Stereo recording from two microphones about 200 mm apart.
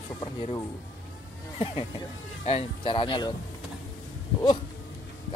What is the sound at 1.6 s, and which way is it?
Speech, 25° left (ahead or behind).